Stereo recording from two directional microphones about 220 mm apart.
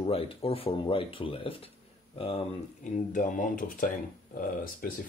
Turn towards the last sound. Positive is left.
turn(degrees=40)  # may be behind; listen again after turning